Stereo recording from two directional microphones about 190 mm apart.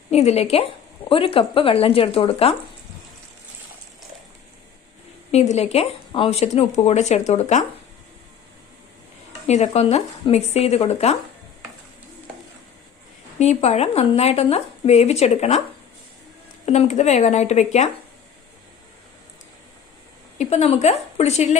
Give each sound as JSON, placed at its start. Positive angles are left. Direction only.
{"t": 0.1, "sound": "speech", "side_deg": 35}
{"t": 5.3, "sound": "speech", "side_deg": 35}
{"t": 9.5, "sound": "speech", "side_deg": 35}
{"t": 13.4, "sound": "speech", "side_deg": 35}
{"t": 16.6, "sound": "speech", "side_deg": 35}
{"t": 20.4, "sound": "speech", "side_deg": 35}